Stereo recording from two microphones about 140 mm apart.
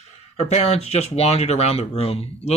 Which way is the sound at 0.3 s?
50° left (ahead or behind).